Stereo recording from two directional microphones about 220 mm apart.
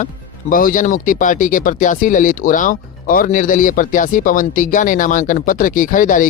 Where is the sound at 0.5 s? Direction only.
40° left (ahead or behind).